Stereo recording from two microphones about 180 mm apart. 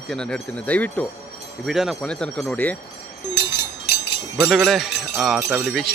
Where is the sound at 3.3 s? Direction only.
65° left (ahead or behind).